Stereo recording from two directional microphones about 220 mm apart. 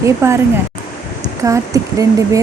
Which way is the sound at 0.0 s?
10° right (ahead or behind).